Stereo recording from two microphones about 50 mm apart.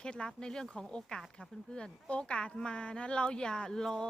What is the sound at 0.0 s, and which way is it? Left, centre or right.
Speech, centre.